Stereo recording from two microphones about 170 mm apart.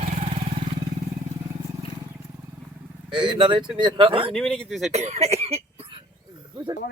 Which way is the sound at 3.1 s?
30° right (ahead or behind).